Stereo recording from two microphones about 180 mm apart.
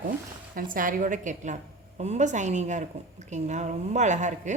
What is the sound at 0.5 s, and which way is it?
A woman's voice, 50° right (ahead or behind).